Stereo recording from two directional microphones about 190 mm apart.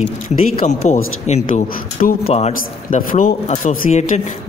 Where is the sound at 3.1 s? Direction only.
45° left (ahead or behind).